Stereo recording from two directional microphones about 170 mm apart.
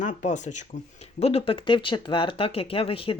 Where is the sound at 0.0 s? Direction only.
45° left (ahead or behind).